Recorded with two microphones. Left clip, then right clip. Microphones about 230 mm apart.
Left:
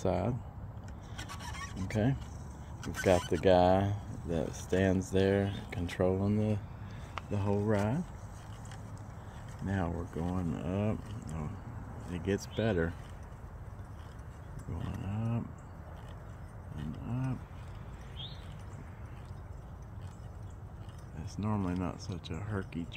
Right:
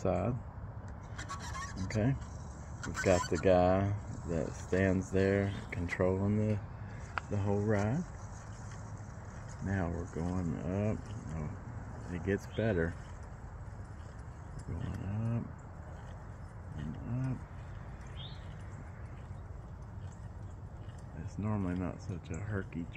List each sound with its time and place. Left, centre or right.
0.0 s speech: centre
1.9 s speech: centre
9.7 s speech: centre
15.0 s a sound: centre
17.1 s speech: centre
21.4 s speech: centre